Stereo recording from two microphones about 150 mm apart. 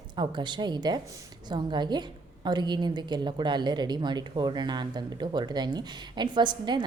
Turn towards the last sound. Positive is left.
turn(degrees=-30)  # may be behind; listen again after turning